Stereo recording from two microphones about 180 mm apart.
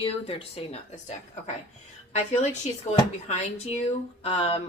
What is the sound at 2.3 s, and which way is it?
Speech, 40° left (ahead or behind).